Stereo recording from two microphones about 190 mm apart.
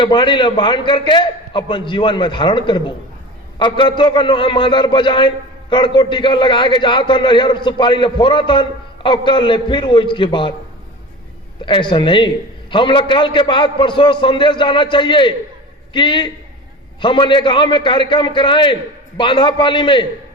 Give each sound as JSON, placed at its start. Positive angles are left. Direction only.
{"t": 0.0, "sound": "a man's voice", "side_deg": 25}
{"t": 11.6, "sound": "a man's voice", "side_deg": 25}